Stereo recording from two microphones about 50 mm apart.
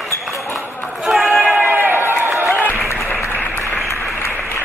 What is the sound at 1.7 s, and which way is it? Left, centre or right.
Run, right.